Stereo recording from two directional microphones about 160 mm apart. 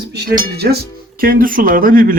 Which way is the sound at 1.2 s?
60° right (ahead or behind).